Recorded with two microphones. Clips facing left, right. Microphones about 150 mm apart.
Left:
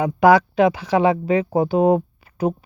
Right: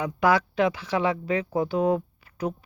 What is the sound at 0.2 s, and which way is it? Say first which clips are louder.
Speech: left 8 dB; 15° left (ahead or behind).